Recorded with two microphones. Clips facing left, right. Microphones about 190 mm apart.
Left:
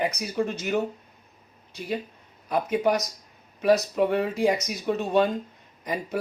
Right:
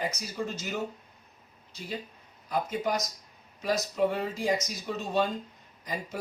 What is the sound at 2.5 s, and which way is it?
Speech, 65° left (ahead or behind).